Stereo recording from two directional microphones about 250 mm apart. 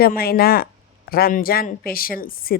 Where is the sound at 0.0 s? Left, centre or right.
Left.